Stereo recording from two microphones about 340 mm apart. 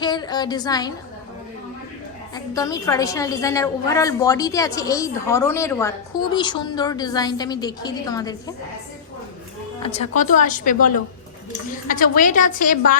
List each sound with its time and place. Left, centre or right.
0.0 s a woman's voice: centre
2.3 s a woman's voice: centre
9.8 s a woman's voice: centre